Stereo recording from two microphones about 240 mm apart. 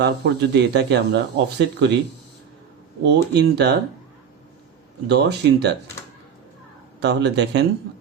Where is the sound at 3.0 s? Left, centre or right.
Right.